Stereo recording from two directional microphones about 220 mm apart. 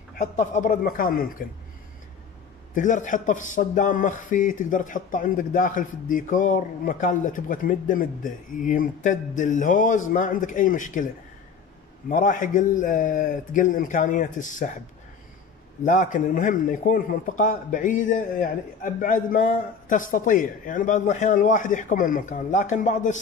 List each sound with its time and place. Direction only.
0.2 s speech: 35° left (ahead or behind)
2.7 s speech: 35° left (ahead or behind)
12.1 s speech: 35° left (ahead or behind)
15.8 s speech: 35° left (ahead or behind)